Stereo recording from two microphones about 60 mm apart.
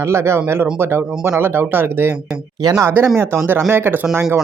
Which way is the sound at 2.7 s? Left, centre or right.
Right.